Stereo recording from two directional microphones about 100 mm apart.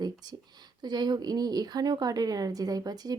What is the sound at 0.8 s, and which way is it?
A woman's voice, 45° right (ahead or behind).